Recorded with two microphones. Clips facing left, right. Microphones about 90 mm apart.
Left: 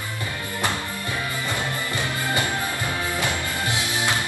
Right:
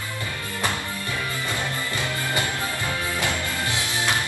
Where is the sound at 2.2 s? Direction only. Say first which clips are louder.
Left 3 dB; 20° left (ahead or behind).